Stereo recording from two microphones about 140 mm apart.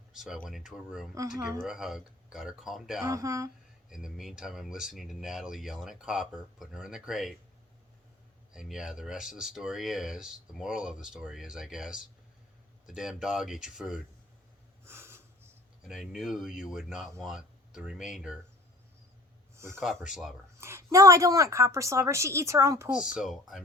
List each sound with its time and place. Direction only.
0.4 s speech: 5° right (ahead or behind)
1.1 s a woman's voice: 25° right (ahead or behind)
1.6 s speech: 5° right (ahead or behind)
3.1 s a woman's voice: 25° right (ahead or behind)
3.8 s speech: 5° right (ahead or behind)
8.5 s speech: 5° right (ahead or behind)
14.8 s snort: 15° right (ahead or behind)
15.8 s speech: 5° right (ahead or behind)
19.5 s speech: 20° right (ahead or behind)
19.8 s speech: centre (ahead or behind)
20.6 s a woman's voice: 20° right (ahead or behind)
22.9 s speech: 5° right (ahead or behind)